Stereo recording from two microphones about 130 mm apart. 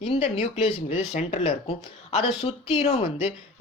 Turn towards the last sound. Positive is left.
turn(degrees=60)  # may be behind; listen again after turning